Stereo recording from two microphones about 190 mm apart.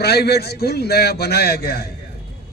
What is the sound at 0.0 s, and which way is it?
A man's voice, 55° left (ahead or behind).